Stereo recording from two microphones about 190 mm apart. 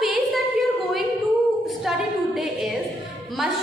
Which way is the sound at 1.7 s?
Centre (ahead or behind).